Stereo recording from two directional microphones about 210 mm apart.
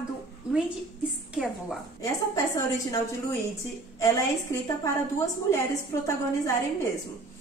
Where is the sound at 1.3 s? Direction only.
Centre (ahead or behind).